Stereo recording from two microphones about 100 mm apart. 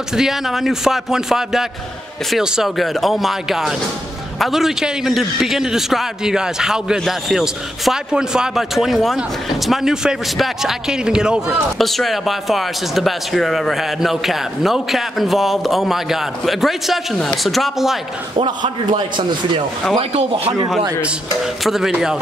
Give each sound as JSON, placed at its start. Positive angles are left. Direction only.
{"t": 0.1, "sound": "a man's voice", "side_deg": -5}
{"t": 18.3, "sound": "a man's voice", "side_deg": -55}
{"t": 20.0, "sound": "speech", "side_deg": -80}
{"t": 21.6, "sound": "speech", "side_deg": -5}